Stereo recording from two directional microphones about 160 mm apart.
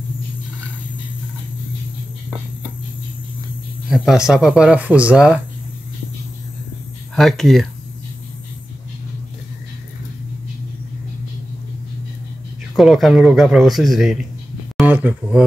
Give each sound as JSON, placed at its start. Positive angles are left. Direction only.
{"t": 3.9, "sound": "speech", "side_deg": -5}
{"t": 7.2, "sound": "speech", "side_deg": 0}
{"t": 12.7, "sound": "speech", "side_deg": 0}
{"t": 14.8, "sound": "a sound", "side_deg": -10}